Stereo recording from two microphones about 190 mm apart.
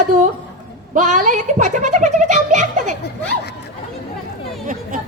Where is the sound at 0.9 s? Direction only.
40° right (ahead or behind).